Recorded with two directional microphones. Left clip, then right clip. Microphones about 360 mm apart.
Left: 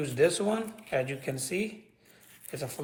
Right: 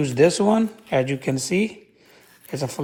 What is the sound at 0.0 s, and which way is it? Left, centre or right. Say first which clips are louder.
A man's voice: right 8 dB; right.